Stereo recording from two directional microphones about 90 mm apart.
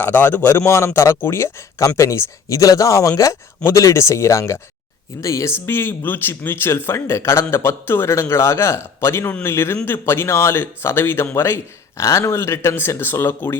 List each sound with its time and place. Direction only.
0.0 s speech: 20° left (ahead or behind)
5.6 s speech: 25° left (ahead or behind)